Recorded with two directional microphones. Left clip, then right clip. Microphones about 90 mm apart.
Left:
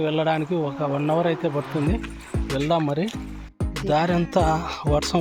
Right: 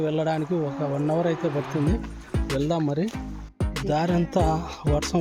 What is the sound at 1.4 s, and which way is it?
Speech, centre (ahead or behind).